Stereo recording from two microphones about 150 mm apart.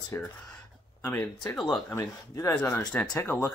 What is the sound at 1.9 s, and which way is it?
Speech, 20° left (ahead or behind).